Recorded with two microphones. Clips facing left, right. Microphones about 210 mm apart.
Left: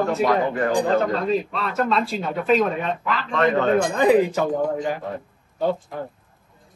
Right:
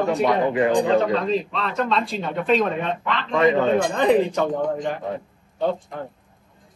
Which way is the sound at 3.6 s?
Centre (ahead or behind).